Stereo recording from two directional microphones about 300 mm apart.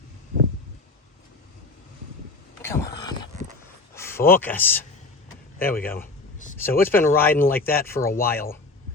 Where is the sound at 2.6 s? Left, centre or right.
Centre.